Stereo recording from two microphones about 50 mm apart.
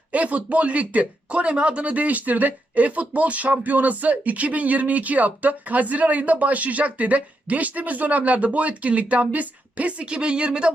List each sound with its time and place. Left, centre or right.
0.1 s speech: right